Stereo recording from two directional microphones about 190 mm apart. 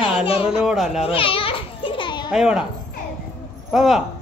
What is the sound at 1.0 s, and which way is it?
Children playing, 30° left (ahead or behind).